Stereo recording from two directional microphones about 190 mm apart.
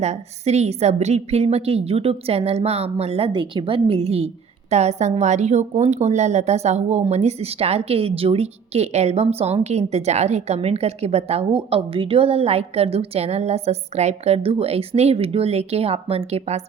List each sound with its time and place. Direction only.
0.0 s a woman's voice: 35° right (ahead or behind)